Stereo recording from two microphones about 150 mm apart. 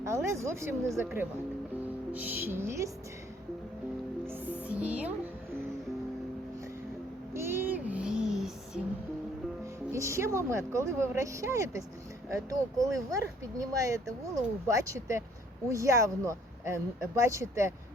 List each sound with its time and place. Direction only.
0.0 s speech: 20° right (ahead or behind)
4.7 s music: 10° right (ahead or behind)
7.3 s child singing: 15° right (ahead or behind)
9.9 s speech: 20° right (ahead or behind)